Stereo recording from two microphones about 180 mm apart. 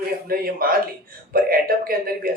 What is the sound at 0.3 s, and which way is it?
Speech, 55° right (ahead or behind).